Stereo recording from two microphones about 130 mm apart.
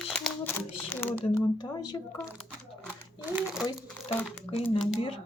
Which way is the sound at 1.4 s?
35° left (ahead or behind).